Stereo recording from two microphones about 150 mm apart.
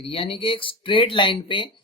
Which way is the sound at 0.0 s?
40° left (ahead or behind).